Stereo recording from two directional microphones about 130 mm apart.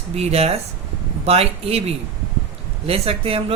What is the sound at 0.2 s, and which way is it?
Speech, 50° right (ahead or behind).